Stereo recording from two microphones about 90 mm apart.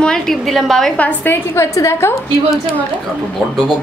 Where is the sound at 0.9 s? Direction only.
20° left (ahead or behind).